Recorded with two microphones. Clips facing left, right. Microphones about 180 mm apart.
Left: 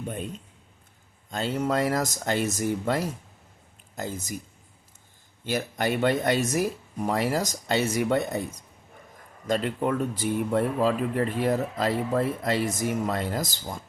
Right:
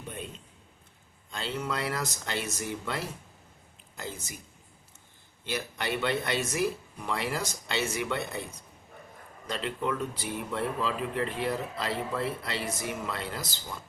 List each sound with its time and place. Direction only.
0.1 s speech: 45° left (ahead or behind)
5.5 s speech: 45° left (ahead or behind)